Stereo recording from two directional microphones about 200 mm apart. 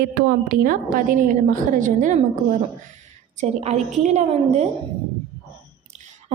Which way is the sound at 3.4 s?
35° right (ahead or behind).